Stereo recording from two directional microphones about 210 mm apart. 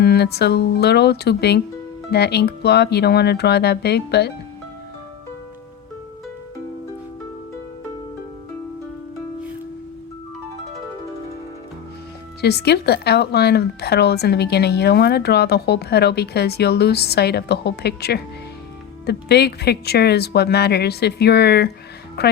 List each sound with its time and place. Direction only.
0.0 s a woman's voice: 50° left (ahead or behind)
12.4 s a woman's voice: 50° left (ahead or behind)